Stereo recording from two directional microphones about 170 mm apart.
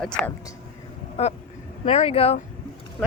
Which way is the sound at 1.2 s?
35° left (ahead or behind).